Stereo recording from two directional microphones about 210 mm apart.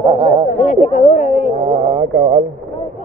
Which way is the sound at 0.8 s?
40° left (ahead or behind).